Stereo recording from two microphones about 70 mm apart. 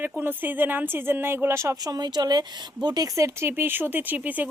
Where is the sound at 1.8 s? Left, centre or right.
Right.